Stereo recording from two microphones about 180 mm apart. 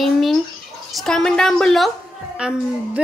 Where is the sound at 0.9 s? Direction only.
5° left (ahead or behind).